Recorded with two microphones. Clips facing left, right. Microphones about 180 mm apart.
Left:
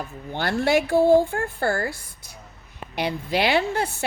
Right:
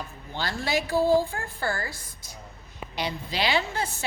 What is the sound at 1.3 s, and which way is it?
A woman's voice, 60° left (ahead or behind).